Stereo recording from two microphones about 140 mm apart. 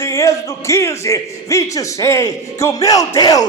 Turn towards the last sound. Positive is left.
turn(degrees=25)  # may be behind; listen again after turning